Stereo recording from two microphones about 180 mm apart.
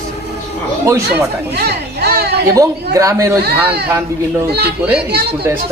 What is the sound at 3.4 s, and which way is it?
Speech, 65° right (ahead or behind).